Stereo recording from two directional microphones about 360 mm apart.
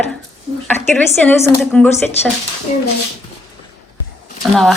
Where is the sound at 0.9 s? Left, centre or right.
Centre.